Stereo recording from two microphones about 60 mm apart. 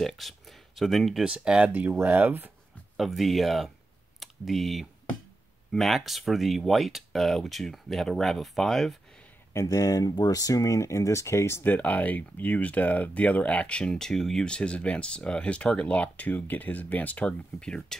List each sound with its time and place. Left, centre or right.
0.0 s speech: centre
1.2 s speech: centre
1.7 s speech: right
3.0 s speech: centre
9.5 s speech: left
11.6 s speech: left